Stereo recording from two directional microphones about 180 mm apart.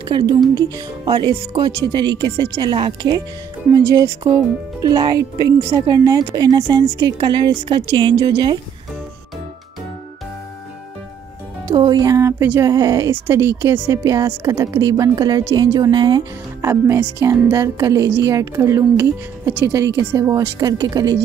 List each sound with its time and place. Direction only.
0.1 s speech: 25° right (ahead or behind)
11.7 s speech: 25° right (ahead or behind)